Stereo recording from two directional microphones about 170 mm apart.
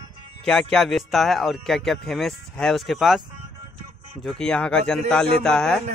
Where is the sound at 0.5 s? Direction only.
5° left (ahead or behind).